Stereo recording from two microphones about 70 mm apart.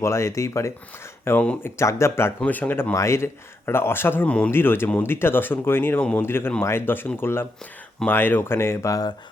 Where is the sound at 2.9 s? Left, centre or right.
Left.